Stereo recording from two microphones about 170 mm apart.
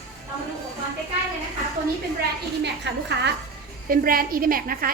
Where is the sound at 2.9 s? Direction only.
90° right.